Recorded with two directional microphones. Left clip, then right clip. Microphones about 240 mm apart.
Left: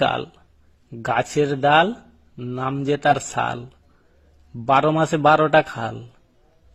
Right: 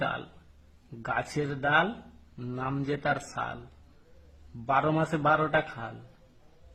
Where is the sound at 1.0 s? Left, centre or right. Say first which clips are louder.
Left 11 dB; left.